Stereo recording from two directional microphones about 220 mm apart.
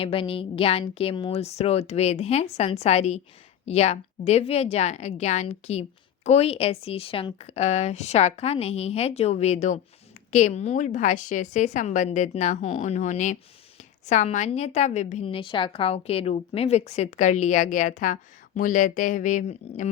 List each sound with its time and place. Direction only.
0.0 s a woman's voice: 25° left (ahead or behind)